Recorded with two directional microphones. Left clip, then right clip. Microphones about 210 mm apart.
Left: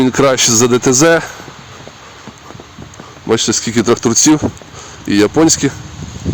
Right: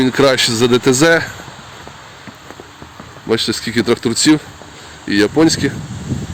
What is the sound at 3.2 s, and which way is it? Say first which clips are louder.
Speech: left 3 dB; 15° left (ahead or behind).